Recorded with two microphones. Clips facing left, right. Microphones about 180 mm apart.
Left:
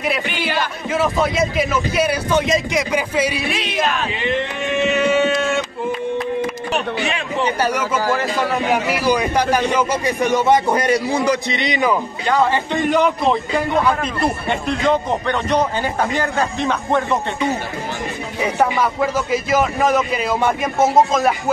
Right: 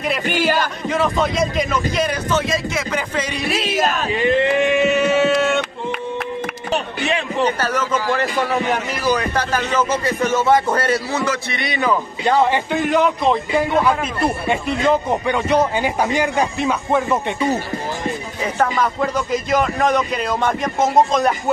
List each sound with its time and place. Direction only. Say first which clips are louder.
0.3 s speech: right 4 dB; 45° right (ahead or behind)
0.8 s a man's voice: left 1 dB; 5° left (ahead or behind)
3.8 s speech: right 1 dB; 40° right (ahead or behind)
4.8 s a sound: right 1 dB; 5° right (ahead or behind)
7.4 s a man's voice: left 2 dB; 15° left (ahead or behind)
12.7 s a man's voice: left 1 dB; centre (ahead or behind)
18.4 s a man's voice: left 2 dB; 10° left (ahead or behind)